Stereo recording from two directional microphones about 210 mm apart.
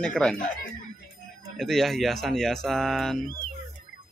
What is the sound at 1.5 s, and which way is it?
Speech, centre (ahead or behind).